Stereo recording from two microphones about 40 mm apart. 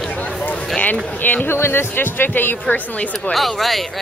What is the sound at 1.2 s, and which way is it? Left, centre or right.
Speech, left.